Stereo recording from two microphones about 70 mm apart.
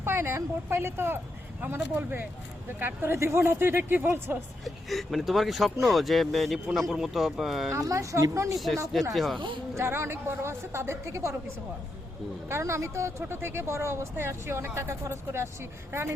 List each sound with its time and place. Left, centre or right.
0.0 s a woman's voice: right
4.6 s speech: centre
7.8 s a woman's voice: right
8.5 s speech: centre
9.7 s a woman's voice: right